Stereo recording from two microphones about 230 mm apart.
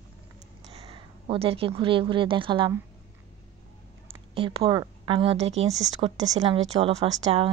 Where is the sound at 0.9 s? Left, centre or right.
Right.